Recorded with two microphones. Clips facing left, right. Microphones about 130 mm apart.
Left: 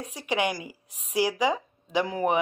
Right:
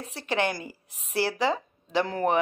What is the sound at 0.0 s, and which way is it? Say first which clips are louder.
Speech: even; 15° left (ahead or behind).